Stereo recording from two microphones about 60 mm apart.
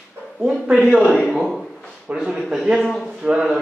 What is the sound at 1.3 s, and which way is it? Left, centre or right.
Speech, centre.